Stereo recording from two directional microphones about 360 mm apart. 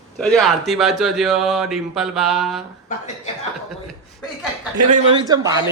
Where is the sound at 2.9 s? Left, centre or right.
Centre.